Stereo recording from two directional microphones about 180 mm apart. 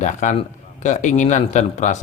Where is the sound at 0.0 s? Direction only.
45° left (ahead or behind).